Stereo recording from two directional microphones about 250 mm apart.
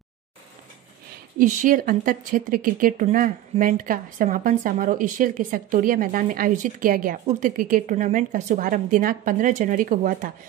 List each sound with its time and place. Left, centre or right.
1.4 s speech: right